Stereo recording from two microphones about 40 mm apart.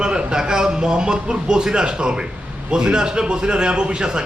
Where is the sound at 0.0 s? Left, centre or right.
Right.